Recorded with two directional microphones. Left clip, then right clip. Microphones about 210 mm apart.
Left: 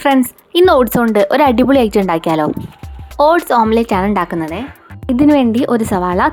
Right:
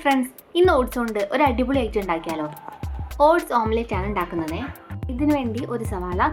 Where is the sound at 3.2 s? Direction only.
45° left (ahead or behind).